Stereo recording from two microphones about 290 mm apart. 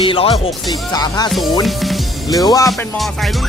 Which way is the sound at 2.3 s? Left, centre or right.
Centre.